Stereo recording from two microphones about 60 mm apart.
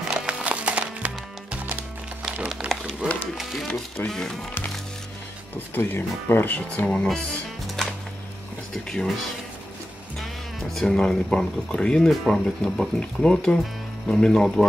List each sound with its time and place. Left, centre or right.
0.3 s music: right
2.6 s a sound: right
3.0 s speech: centre
4.1 s speech: centre
5.8 s speech: left
6.7 s speech: centre
7.6 s music: centre
8.7 s speech: centre
10.1 s speech: centre